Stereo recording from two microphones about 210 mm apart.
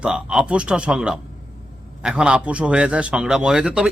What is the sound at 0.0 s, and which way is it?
A man's voice, 5° right (ahead or behind).